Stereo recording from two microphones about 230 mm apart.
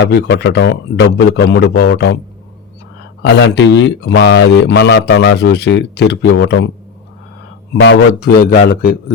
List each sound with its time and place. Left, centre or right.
0.0 s speech: left
3.2 s speech: left
7.8 s speech: left